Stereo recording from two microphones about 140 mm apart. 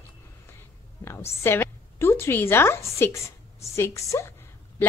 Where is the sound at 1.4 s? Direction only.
15° left (ahead or behind).